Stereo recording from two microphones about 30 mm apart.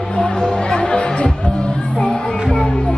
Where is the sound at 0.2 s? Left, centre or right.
Left.